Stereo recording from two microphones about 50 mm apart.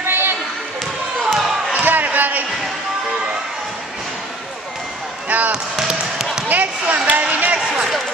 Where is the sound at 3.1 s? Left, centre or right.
Right.